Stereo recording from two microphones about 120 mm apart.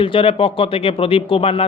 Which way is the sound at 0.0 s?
45° left (ahead or behind).